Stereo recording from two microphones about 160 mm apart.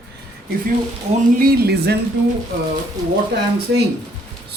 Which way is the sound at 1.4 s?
80° right.